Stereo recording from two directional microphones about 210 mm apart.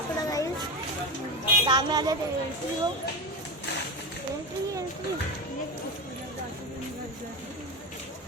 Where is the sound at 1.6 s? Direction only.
20° right (ahead or behind).